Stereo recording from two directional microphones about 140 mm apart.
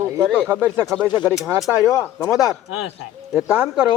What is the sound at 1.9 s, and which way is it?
Speech, 25° left (ahead or behind).